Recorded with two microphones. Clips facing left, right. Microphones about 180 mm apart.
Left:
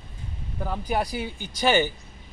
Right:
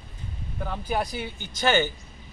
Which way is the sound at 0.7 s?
10° left (ahead or behind).